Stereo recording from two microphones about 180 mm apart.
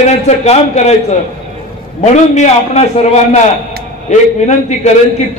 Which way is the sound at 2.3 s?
35° left (ahead or behind).